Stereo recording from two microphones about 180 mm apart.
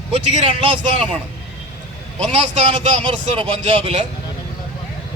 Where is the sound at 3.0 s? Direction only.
30° right (ahead or behind).